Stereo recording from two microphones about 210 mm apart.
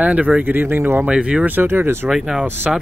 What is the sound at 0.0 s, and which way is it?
Speech, 5° right (ahead or behind).